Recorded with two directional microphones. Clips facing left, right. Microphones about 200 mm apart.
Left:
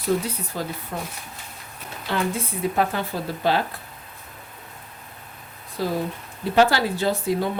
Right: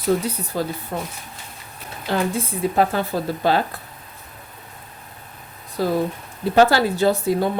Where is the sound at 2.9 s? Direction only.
40° right (ahead or behind).